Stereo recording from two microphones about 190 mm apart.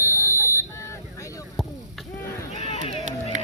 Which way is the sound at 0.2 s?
15° left (ahead or behind).